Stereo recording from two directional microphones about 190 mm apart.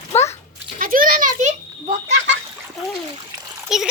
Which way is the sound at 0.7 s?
45° right (ahead or behind).